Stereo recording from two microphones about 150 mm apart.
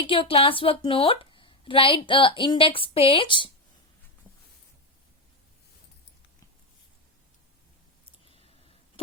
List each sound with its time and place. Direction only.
0.1 s speech: 40° left (ahead or behind)